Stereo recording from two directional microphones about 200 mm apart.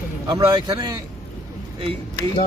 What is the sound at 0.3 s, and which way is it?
Speech, 20° right (ahead or behind).